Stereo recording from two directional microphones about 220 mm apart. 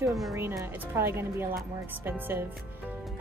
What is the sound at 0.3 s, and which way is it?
Speech, 15° right (ahead or behind).